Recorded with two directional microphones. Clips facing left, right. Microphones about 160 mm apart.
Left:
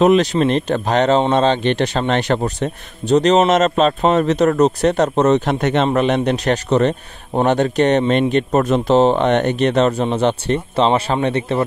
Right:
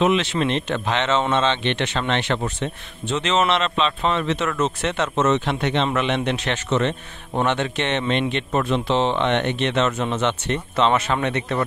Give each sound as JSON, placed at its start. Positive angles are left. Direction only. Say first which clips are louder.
{"t": 0.0, "sound": "speech", "louder": "left 7 dB", "side_deg": 40}